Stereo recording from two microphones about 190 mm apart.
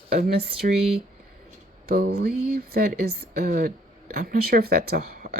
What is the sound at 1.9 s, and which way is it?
Speech, 55° right (ahead or behind).